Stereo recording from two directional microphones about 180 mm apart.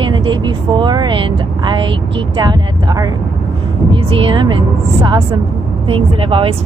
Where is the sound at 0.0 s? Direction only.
25° right (ahead or behind).